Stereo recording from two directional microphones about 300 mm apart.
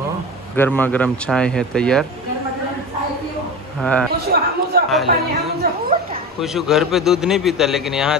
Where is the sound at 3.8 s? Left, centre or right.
Centre.